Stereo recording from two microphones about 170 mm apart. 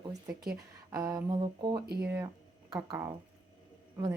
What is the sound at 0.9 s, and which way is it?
A woman's voice, 20° right (ahead or behind).